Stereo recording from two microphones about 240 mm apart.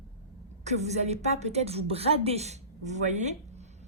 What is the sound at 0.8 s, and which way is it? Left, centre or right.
A woman's voice, right.